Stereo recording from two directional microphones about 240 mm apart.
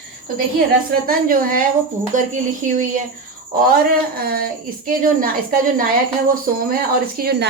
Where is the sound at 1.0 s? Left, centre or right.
Right.